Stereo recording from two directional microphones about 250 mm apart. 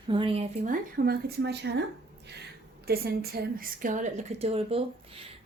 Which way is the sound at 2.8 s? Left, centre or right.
Right.